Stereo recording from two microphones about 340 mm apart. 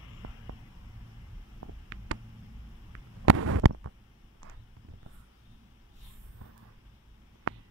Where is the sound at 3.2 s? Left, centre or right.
Right.